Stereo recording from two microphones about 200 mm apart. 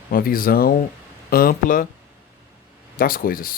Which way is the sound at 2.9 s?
45° left (ahead or behind).